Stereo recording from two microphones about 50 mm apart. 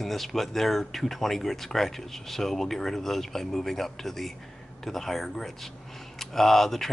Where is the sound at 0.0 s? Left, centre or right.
Centre.